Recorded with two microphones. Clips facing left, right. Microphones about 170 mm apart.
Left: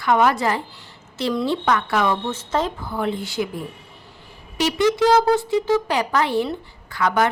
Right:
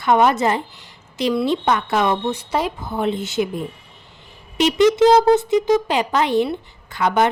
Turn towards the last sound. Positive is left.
turn(degrees=-20)  # may be behind; listen again after turning